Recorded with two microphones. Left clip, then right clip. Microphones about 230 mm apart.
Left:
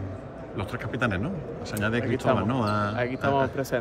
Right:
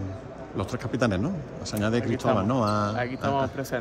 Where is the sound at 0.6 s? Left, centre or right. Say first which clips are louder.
Right 2 dB; right.